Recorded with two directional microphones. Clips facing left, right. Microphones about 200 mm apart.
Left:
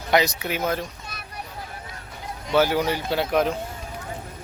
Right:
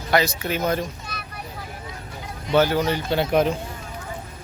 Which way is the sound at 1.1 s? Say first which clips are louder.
Right 5 dB; 45° left (ahead or behind).